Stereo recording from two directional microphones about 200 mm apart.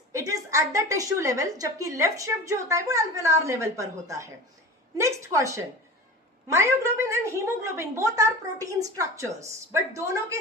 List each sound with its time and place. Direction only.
0.1 s a woman's voice: 15° right (ahead or behind)